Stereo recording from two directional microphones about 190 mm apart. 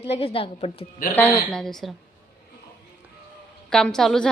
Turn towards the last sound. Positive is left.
turn(degrees=5)  # may be behind; listen again after turning